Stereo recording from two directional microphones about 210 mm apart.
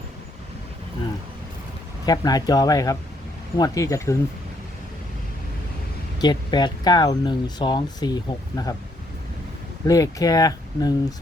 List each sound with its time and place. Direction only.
2.0 s speech: 20° left (ahead or behind)
6.1 s speech: 20° left (ahead or behind)
9.8 s speech: 15° left (ahead or behind)